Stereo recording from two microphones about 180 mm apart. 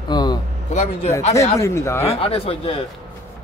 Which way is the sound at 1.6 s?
15° left (ahead or behind).